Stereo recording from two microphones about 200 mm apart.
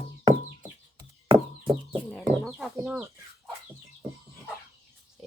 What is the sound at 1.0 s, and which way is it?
Chicken, 10° right (ahead or behind).